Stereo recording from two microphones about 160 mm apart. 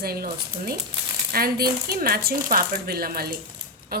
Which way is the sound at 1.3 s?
70° right (ahead or behind).